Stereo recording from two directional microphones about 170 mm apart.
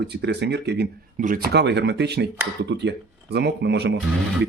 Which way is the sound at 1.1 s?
50° right (ahead or behind).